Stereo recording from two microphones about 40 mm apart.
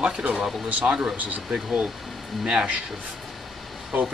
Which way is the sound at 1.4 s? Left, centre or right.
Centre.